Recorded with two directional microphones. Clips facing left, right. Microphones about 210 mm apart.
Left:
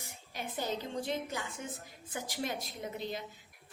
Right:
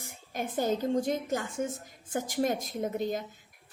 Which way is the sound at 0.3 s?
45° right (ahead or behind).